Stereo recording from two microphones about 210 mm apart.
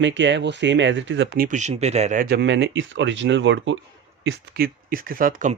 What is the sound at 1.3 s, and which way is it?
Speech, 40° right (ahead or behind).